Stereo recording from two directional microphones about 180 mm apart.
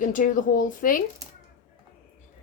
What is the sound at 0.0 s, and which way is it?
Speech, 50° left (ahead or behind).